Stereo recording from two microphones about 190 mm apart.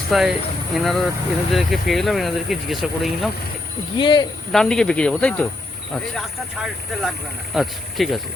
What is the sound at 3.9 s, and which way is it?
Speech, 25° left (ahead or behind).